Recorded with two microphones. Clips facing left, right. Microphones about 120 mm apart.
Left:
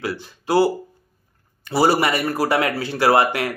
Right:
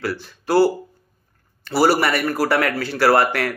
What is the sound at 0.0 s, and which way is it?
A man's voice, 20° left (ahead or behind).